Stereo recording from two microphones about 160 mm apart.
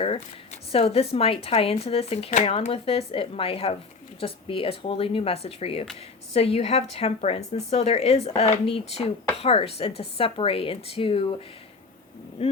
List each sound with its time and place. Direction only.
0.7 s speech: 40° left (ahead or behind)
12.4 s speech: 40° left (ahead or behind)